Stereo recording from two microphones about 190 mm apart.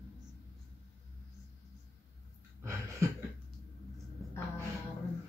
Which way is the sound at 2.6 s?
15° right (ahead or behind).